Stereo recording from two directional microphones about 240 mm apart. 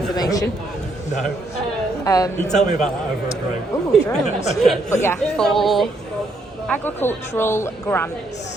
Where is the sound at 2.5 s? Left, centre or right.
Centre.